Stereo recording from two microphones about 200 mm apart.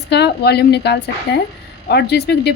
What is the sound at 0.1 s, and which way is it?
A woman's voice, 55° left (ahead or behind).